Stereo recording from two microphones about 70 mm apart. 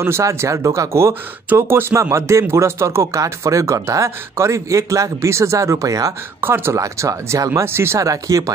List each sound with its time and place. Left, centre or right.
0.0 s speech: right
1.5 s speech: right
6.4 s speech: right
6.8 s speech: right
7.6 s speech: right
8.0 s speech: right